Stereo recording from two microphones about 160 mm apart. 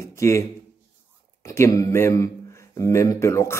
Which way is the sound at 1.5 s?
20° left (ahead or behind).